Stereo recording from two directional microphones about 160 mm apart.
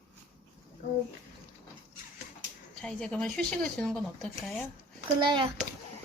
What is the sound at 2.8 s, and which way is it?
Speech, 5° left (ahead or behind).